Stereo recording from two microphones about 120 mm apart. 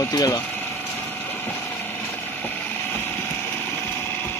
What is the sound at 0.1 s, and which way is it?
Speech, 30° left (ahead or behind).